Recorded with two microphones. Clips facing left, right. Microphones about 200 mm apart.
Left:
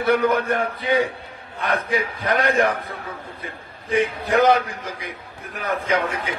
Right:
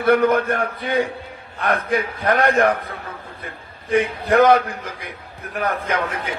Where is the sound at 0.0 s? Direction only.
55° right (ahead or behind).